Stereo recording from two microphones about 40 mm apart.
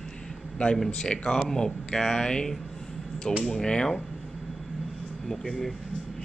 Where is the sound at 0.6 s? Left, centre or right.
Left.